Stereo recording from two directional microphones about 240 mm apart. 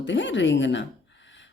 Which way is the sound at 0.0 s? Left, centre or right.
Left.